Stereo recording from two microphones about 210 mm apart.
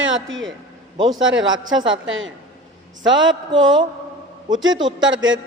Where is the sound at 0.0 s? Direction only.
65° right (ahead or behind).